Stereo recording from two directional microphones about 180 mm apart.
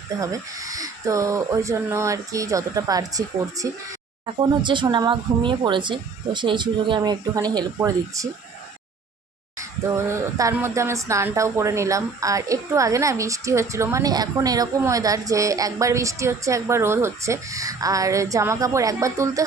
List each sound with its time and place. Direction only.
0.2 s a woman's voice: 20° right (ahead or behind)
9.6 s speech: 15° right (ahead or behind)